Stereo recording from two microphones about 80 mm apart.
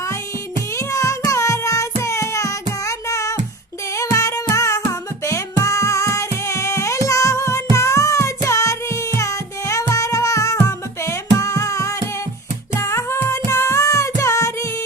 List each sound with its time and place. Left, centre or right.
0.8 s child singing: left
2.8 s music: left